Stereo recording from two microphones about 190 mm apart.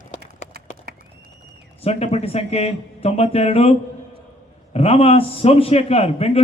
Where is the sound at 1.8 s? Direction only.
35° left (ahead or behind).